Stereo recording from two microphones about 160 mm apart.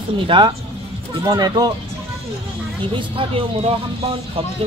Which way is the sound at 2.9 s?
35° right (ahead or behind).